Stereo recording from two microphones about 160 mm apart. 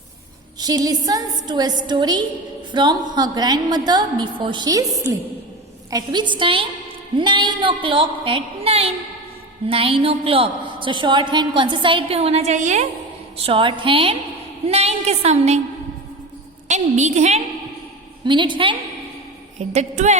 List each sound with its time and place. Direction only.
0.6 s a woman's voice: 25° right (ahead or behind); by 12.8 s 50° right (ahead or behind)
13.3 s a woman's voice: 35° right (ahead or behind)
16.6 s a woman's voice: 45° right (ahead or behind)
18.3 s a woman's voice: 30° right (ahead or behind)
19.5 s a woman's voice: 45° right (ahead or behind)